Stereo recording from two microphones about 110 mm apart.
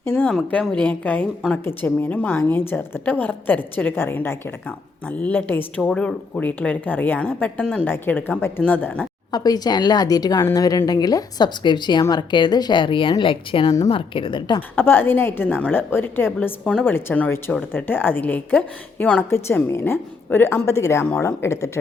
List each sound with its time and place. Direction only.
0.0 s speech: 15° left (ahead or behind)
0.3 s speech: 5° left (ahead or behind)
9.3 s a woman's voice: 35° left (ahead or behind)
14.8 s a woman's voice: 20° left (ahead or behind)